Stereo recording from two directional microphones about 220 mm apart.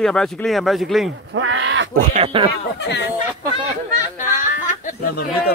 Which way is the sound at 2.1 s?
25° right (ahead or behind).